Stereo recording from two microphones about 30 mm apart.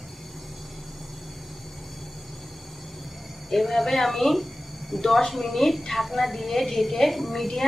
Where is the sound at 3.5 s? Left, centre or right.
Centre.